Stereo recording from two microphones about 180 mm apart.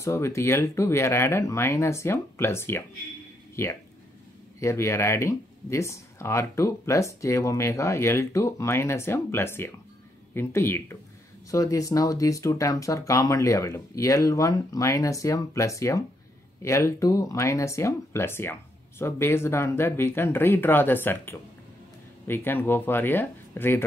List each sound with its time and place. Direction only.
0.0 s speech: 15° left (ahead or behind)